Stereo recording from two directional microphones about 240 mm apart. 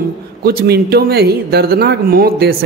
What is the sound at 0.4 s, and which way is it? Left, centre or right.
A woman's voice, right.